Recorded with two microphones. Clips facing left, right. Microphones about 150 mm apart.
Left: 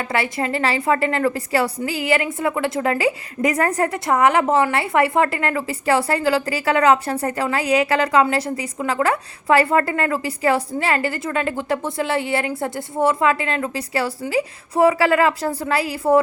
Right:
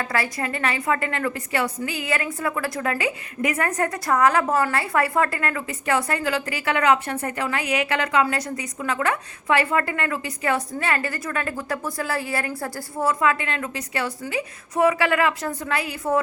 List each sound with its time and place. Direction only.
0.0 s a woman's voice: 25° left (ahead or behind)